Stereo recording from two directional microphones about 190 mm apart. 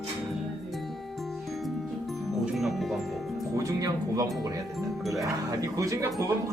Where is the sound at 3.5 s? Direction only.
15° right (ahead or behind).